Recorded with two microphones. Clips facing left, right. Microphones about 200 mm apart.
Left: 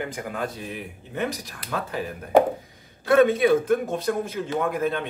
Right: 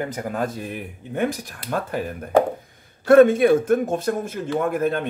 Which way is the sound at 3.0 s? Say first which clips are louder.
Right 5 dB; 50° right (ahead or behind).